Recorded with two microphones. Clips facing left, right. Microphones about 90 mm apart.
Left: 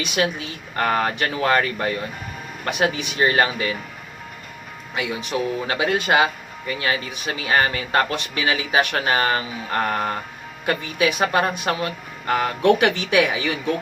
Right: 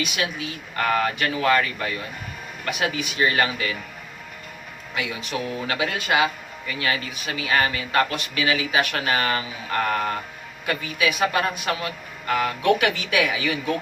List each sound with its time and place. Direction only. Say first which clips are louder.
0.0 s speech: left 4 dB; 35° left (ahead or behind)
4.9 s speech: left 4 dB; 30° left (ahead or behind)